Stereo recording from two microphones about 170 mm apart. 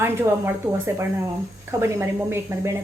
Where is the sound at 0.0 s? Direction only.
15° right (ahead or behind).